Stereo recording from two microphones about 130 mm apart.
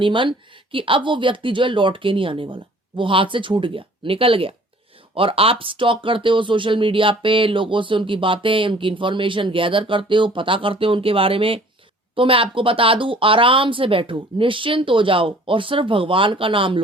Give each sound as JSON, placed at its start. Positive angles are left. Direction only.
{"t": 0.0, "sound": "speech", "side_deg": -40}